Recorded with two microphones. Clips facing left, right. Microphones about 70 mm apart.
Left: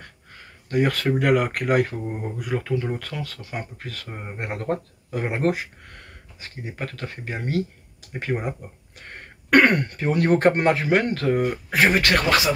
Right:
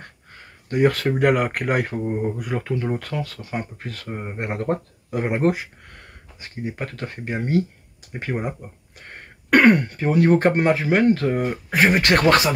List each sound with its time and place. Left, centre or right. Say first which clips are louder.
0.7 s speech: right 3 dB; centre
2.8 s speech: right 3 dB; right
5.1 s speech: right 3 dB; centre
8.1 s speech: even; centre
11.9 s speech: right 2 dB; right
12.2 s speech: right 4 dB; right